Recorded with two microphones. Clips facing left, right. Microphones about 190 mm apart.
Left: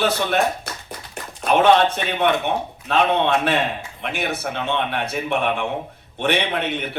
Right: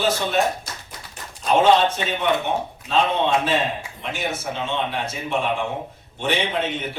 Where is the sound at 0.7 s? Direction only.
60° left (ahead or behind).